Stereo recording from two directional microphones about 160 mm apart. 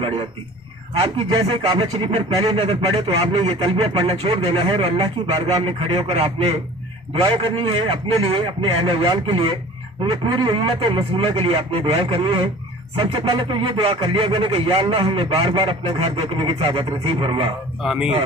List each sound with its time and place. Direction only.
1.0 s speech: 40° right (ahead or behind)
17.8 s speech: 5° right (ahead or behind)